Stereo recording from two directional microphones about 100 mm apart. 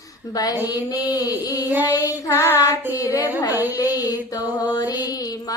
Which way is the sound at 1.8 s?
35° left (ahead or behind).